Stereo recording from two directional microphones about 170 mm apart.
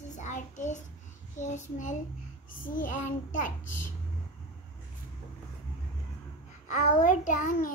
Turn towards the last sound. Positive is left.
turn(degrees=50)  # may be behind; listen again after turning